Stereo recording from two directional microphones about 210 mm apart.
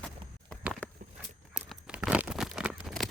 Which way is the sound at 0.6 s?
Centre (ahead or behind).